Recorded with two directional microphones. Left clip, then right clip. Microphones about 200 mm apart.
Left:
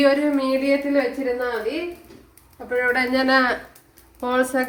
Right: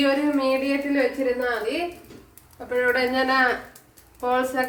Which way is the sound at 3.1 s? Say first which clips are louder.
Left 2 dB; 50° left (ahead or behind).